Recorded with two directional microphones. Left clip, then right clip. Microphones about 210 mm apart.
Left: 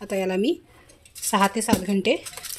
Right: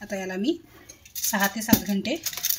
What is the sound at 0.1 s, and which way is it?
Speech, 40° left (ahead or behind).